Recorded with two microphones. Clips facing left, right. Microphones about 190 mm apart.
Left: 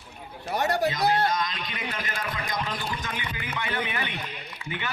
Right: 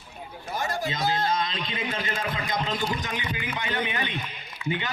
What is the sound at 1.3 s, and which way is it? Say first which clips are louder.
A man's voice: right 2 dB; 30° right (ahead or behind).